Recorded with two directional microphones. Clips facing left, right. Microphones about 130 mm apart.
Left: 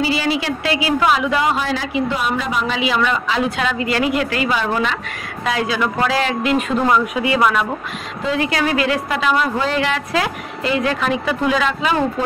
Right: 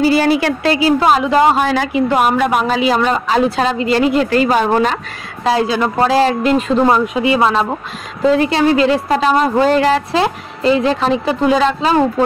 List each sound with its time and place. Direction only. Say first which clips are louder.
0.0 s speech: right 7 dB; 50° right (ahead or behind)
0.7 s a woman's voice: right 5 dB; 35° right (ahead or behind)
1.6 s a woman's voice: right 6 dB; 55° right (ahead or behind)
2.6 s a woman's voice: right 5 dB; 40° right (ahead or behind)
5.4 s a woman's voice: right 5 dB; 30° right (ahead or behind)